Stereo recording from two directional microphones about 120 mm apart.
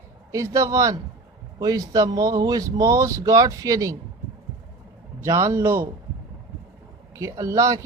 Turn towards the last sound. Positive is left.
turn(degrees=-30)  # may be behind; listen again after turning